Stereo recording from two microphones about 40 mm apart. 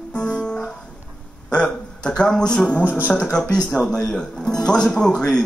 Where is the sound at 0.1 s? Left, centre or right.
Left.